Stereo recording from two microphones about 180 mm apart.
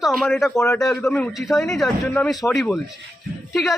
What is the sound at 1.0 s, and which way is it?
A man's voice, 5° left (ahead or behind).